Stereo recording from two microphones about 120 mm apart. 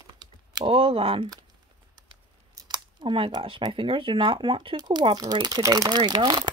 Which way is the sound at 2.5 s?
35° right (ahead or behind).